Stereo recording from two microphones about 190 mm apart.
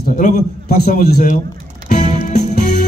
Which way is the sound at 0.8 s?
45° left (ahead or behind).